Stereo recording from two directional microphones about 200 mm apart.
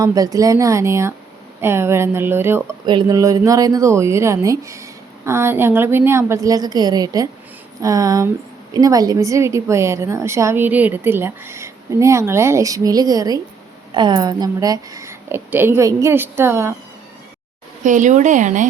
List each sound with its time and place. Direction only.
0.0 s speech: 15° right (ahead or behind)
17.8 s speech: 40° right (ahead or behind)